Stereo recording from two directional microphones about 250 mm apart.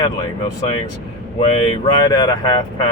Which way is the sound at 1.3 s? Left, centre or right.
Left.